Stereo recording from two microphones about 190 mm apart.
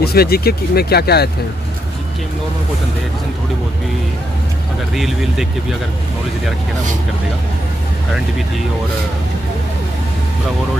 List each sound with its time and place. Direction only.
0.0 s speech: 55° left (ahead or behind)
4.9 s speech: centre (ahead or behind)